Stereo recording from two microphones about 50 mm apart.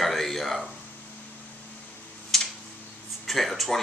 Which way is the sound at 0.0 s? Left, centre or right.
Centre.